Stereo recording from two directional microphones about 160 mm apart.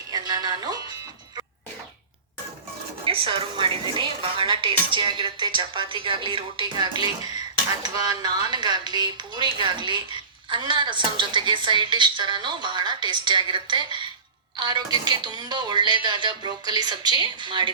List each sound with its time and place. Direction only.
0.1 s music: 25° right (ahead or behind)
3.0 s a woman's voice: 35° right (ahead or behind)